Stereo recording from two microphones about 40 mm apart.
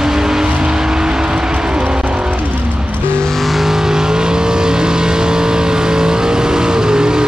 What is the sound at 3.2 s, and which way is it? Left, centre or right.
Vehicle, centre.